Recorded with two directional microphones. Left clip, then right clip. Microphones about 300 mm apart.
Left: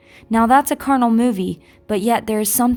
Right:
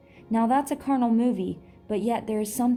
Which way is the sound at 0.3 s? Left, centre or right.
Left.